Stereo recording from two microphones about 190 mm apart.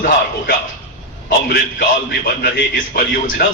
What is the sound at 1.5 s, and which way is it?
A man's voice, 50° left (ahead or behind).